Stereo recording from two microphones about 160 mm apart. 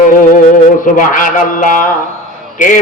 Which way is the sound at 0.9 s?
55° left (ahead or behind).